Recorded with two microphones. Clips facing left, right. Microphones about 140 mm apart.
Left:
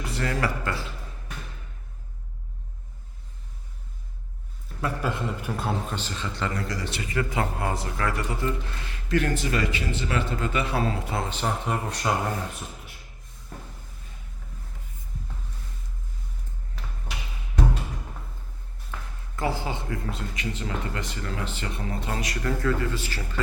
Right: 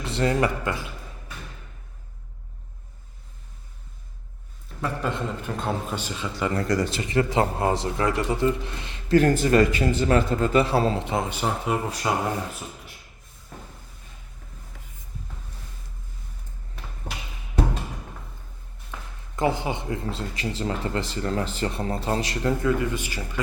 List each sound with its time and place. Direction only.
0.0 s a man's voice: 25° right (ahead or behind)
4.8 s a man's voice: 5° left (ahead or behind)
5.9 s a man's voice: 10° right (ahead or behind)
6.6 s speech: 45° right (ahead or behind)
7.0 s a man's voice: 25° right (ahead or behind)
9.0 s speech: 35° right (ahead or behind); by 12.1 s 5° right (ahead or behind)
18.9 s a sound: 15° right (ahead or behind)
19.4 s speech: 20° right (ahead or behind)